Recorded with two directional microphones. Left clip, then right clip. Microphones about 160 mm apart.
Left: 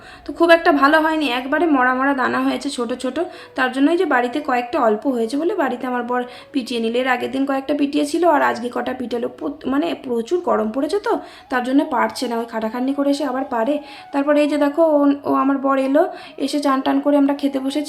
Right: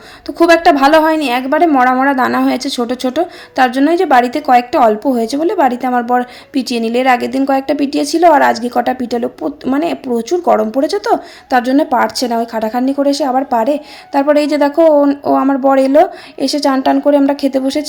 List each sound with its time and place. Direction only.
0.3 s a woman's voice: 40° right (ahead or behind)